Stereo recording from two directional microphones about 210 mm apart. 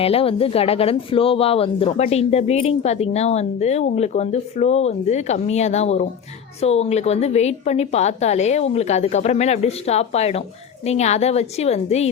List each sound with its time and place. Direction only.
0.0 s speech: 25° left (ahead or behind)